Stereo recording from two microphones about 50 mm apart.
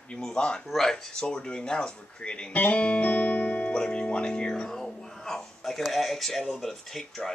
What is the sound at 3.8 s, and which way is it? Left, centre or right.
Speech, centre.